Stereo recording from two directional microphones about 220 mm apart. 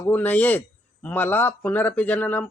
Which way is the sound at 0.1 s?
10° left (ahead or behind).